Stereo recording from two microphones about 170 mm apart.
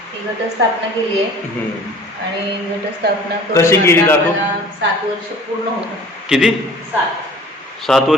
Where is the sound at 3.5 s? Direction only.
15° left (ahead or behind).